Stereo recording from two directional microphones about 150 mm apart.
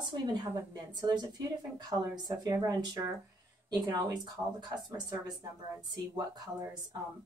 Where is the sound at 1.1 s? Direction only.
25° right (ahead or behind).